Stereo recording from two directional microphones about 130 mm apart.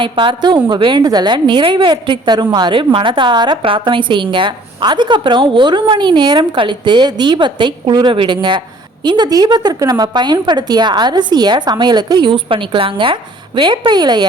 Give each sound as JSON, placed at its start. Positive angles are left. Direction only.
{"t": 0.0, "sound": "a woman's voice", "side_deg": -40}